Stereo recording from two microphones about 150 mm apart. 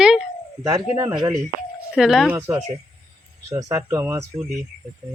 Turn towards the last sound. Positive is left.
turn(degrees=-20)  # may be behind; listen again after turning